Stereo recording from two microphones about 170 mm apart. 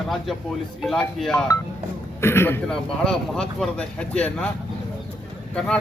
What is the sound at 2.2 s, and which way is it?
Speech, 15° left (ahead or behind).